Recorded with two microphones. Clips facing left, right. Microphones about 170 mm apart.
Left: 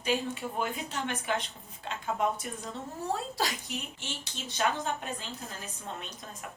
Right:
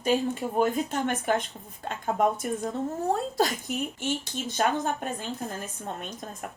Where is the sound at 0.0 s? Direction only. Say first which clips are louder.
Right 6 dB; 45° right (ahead or behind).